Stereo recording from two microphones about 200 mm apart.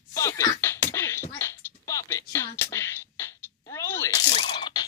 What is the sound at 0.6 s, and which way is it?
Beatboxing, 15° left (ahead or behind).